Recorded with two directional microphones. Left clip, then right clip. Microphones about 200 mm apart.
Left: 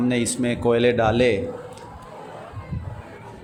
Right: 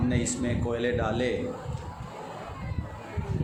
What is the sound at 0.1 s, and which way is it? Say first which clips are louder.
A man's voice: left 7 dB; 40° left (ahead or behind).